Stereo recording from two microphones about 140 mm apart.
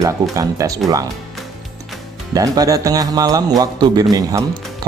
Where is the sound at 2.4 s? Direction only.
25° right (ahead or behind).